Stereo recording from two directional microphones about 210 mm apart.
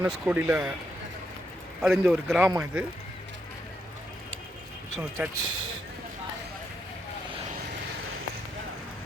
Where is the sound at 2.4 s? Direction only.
10° right (ahead or behind).